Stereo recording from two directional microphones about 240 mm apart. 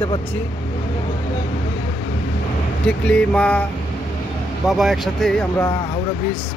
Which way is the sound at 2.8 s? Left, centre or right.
Centre.